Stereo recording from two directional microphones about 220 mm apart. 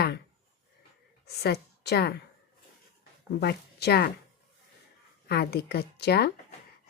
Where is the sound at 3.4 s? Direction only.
45° left (ahead or behind).